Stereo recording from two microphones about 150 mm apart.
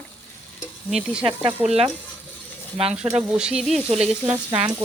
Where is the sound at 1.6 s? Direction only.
45° right (ahead or behind).